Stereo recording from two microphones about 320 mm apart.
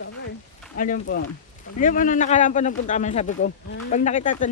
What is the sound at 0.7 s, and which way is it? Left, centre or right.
Speech, left.